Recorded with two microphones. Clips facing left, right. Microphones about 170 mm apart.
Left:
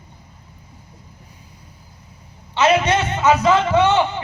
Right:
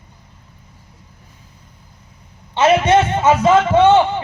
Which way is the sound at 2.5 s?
25° right (ahead or behind).